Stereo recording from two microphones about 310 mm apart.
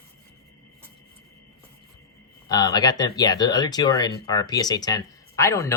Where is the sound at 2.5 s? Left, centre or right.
Centre.